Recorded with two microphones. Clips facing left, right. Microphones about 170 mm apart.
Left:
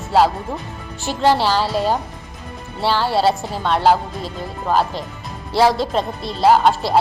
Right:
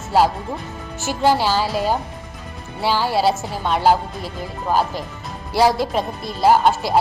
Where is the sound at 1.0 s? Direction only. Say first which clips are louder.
Left 1 dB; 5° right (ahead or behind).